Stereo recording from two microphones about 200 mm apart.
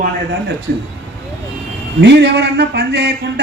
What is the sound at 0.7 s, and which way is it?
Speech, 50° right (ahead or behind).